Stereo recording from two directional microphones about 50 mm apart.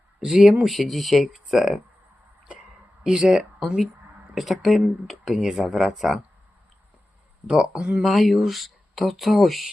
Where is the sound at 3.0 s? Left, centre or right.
Centre.